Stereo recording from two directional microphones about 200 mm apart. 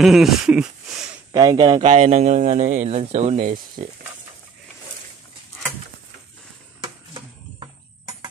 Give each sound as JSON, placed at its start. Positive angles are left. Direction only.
{"t": 0.0, "sound": "speech", "side_deg": 0}
{"t": 1.3, "sound": "a man's voice", "side_deg": -20}
{"t": 6.8, "sound": "a sound", "side_deg": -25}